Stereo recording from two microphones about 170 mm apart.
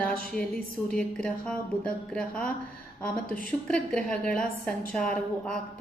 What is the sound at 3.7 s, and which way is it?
A woman's voice, 5° left (ahead or behind).